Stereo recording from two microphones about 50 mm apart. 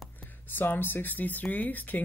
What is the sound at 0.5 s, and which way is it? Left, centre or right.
Speech, left.